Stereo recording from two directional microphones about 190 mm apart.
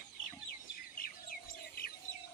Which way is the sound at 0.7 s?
50° left (ahead or behind).